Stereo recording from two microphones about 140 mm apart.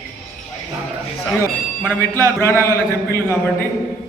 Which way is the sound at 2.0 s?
15° left (ahead or behind).